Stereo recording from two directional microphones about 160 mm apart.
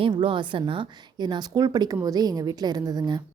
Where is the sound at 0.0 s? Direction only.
35° right (ahead or behind).